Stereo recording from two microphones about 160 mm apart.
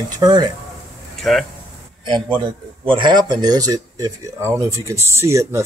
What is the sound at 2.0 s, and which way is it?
Speech, 30° right (ahead or behind).